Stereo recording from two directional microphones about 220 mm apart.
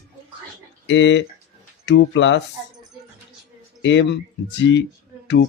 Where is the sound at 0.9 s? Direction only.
55° left (ahead or behind).